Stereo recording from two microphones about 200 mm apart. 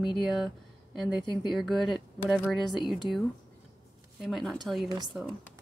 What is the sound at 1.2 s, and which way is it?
Speech, 25° left (ahead or behind).